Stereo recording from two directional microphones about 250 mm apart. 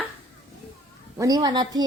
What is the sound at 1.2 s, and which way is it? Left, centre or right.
Speech, centre.